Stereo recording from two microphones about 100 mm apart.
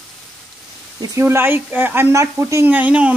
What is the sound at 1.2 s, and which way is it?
Speech, 25° right (ahead or behind).